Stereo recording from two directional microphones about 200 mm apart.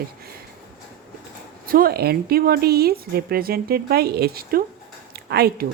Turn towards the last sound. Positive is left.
turn(degrees=-50)  # may be behind; listen again after turning